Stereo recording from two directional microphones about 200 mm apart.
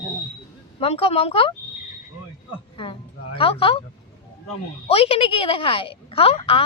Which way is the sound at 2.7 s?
25° left (ahead or behind).